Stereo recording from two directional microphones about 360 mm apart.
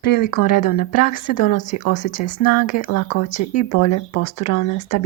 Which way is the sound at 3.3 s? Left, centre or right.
Centre.